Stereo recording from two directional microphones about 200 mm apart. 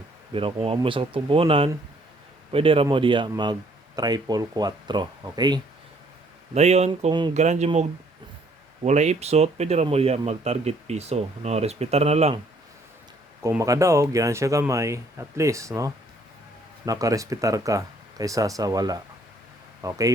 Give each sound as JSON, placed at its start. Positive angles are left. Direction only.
{"t": 0.3, "sound": "speech", "side_deg": -25}
{"t": 6.5, "sound": "speech", "side_deg": -35}
{"t": 7.1, "sound": "speech", "side_deg": -20}
{"t": 7.3, "sound": "speech", "side_deg": -35}
{"t": 8.8, "sound": "speech", "side_deg": -35}
{"t": 13.4, "sound": "speech", "side_deg": -15}